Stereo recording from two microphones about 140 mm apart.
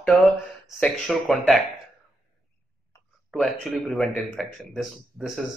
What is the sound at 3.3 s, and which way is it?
A man's voice, centre (ahead or behind).